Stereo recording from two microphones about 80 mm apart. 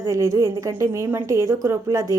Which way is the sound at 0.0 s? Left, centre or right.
Right.